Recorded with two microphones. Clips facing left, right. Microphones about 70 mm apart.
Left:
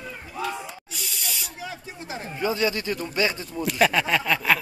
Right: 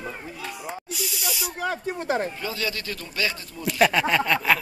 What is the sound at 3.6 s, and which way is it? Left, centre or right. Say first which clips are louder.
Speech: right 1 dB; centre.